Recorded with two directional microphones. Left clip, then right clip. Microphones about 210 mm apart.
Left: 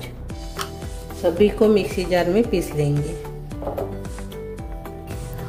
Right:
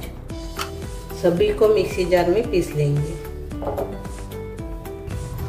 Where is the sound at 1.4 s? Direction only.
45° left (ahead or behind).